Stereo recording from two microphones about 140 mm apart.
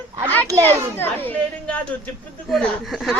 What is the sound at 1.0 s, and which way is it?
A woman's voice, 15° left (ahead or behind).